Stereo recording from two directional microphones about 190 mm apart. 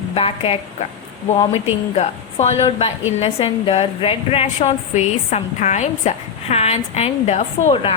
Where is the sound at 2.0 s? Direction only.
35° left (ahead or behind).